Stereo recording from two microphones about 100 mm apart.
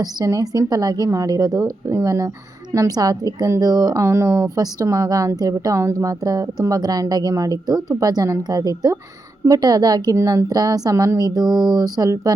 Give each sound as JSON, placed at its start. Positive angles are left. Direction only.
{"t": 0.0, "sound": "a woman's voice", "side_deg": -40}
{"t": 4.0, "sound": "a woman's voice", "side_deg": -30}